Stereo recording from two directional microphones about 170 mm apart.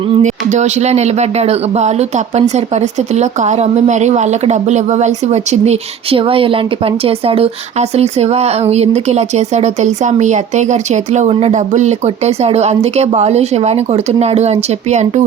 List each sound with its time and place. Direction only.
0.2 s speech: 45° right (ahead or behind)